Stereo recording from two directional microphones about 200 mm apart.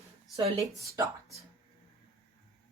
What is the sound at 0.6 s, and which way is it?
Speech, 15° right (ahead or behind).